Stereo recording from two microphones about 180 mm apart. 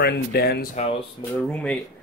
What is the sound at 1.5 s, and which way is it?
Speech, 5° left (ahead or behind).